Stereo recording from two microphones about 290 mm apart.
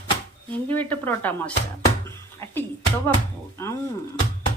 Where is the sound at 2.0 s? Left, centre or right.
Centre.